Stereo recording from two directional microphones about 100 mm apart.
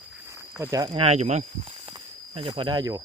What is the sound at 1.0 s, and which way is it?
Speech, 90° right.